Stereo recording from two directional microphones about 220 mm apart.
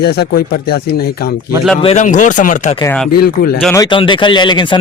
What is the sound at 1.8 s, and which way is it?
Speech, 30° left (ahead or behind).